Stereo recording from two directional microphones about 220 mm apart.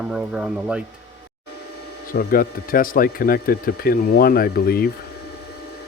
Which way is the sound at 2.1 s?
40° left (ahead or behind).